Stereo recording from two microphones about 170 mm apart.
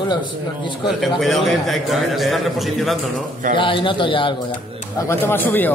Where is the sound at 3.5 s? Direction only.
30° left (ahead or behind).